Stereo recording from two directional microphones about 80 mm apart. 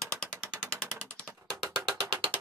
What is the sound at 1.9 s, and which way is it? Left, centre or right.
Music, right.